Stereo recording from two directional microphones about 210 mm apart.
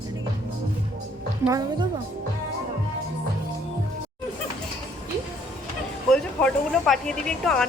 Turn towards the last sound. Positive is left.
turn(degrees=5)  # may be behind; listen again after turning